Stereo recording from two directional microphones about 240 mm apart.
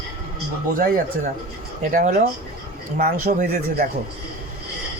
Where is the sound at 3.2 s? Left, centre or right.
Right.